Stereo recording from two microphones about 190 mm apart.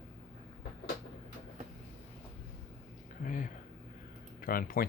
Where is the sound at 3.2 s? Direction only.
45° left (ahead or behind).